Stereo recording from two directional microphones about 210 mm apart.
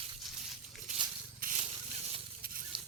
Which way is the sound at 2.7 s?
25° right (ahead or behind).